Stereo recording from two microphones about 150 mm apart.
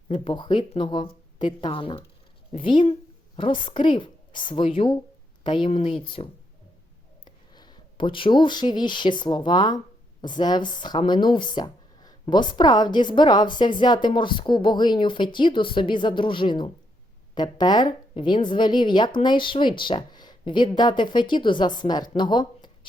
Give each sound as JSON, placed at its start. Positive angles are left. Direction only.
{"t": 0.1, "sound": "speech", "side_deg": 35}
{"t": 7.3, "sound": "speech", "side_deg": 30}
{"t": 22.2, "sound": "a sound", "side_deg": 30}